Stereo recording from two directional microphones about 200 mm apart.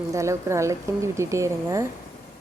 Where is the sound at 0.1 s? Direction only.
15° right (ahead or behind).